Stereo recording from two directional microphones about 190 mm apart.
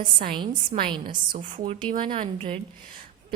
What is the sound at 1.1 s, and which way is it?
Speech, 45° right (ahead or behind).